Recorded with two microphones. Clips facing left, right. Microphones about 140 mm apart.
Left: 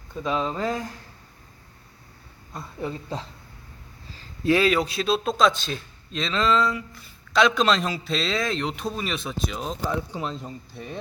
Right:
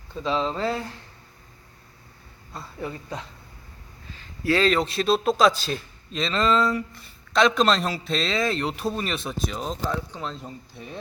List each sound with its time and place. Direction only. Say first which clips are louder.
0.1 s speech: right 1 dB; 10° left (ahead or behind)
2.8 s speech: left 2 dB; 25° left (ahead or behind)
4.4 s a man's voice: left 1 dB; 10° left (ahead or behind)
10.3 s a man's voice: left 2 dB; centre (ahead or behind)